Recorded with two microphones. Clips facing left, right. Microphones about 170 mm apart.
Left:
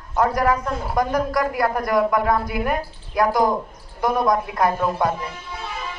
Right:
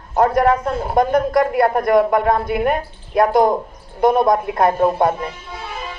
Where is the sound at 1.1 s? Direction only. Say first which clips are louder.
Right 6 dB; 55° right (ahead or behind).